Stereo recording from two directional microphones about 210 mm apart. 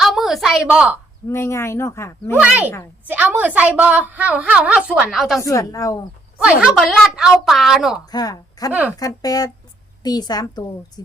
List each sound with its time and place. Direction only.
0.0 s a sound: centre (ahead or behind)
1.3 s speech: 10° left (ahead or behind)
2.3 s a woman's voice: 10° right (ahead or behind)
5.4 s speech: 15° left (ahead or behind)
6.4 s a woman's voice: 5° right (ahead or behind)
8.1 s a woman's voice: 15° left (ahead or behind)